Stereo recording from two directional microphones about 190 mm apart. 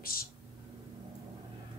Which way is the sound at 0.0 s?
50° left (ahead or behind).